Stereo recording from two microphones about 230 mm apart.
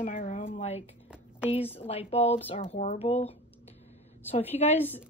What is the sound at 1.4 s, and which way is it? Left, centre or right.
Speech, left.